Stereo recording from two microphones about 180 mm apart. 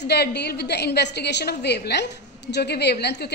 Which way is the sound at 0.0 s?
65° left (ahead or behind).